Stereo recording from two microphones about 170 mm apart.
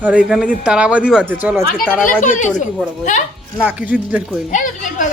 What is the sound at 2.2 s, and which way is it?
Speech, 50° left (ahead or behind).